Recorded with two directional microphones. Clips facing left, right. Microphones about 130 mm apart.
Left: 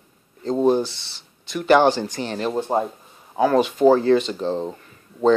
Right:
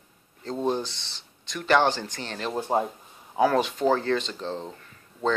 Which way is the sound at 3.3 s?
Centre (ahead or behind).